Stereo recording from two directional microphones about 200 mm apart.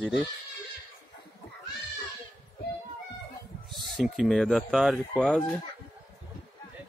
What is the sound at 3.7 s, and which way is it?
Speech, centre (ahead or behind).